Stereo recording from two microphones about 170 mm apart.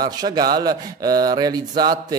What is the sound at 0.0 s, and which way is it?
Speech, 25° right (ahead or behind).